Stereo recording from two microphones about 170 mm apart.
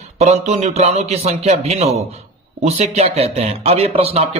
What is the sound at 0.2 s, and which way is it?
Speech, 40° right (ahead or behind).